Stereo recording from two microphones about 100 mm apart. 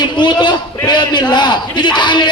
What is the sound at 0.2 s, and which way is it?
A man's voice, 50° left (ahead or behind).